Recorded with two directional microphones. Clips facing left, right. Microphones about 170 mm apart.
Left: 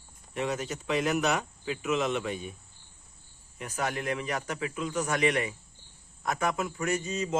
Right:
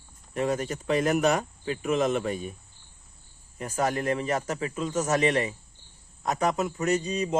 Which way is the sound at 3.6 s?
40° right (ahead or behind).